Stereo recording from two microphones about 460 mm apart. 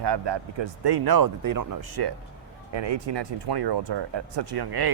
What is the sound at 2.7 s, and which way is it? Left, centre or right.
Speech, right.